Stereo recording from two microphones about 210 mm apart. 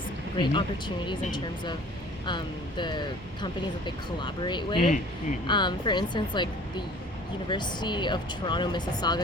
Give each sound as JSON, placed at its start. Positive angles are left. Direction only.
{"t": 0.3, "sound": "speech", "side_deg": 20}
{"t": 2.2, "sound": "speech", "side_deg": 20}